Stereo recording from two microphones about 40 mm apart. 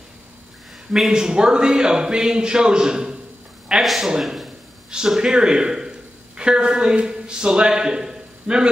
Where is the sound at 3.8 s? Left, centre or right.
Centre.